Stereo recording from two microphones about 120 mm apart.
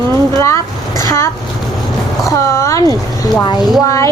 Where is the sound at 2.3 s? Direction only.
25° left (ahead or behind).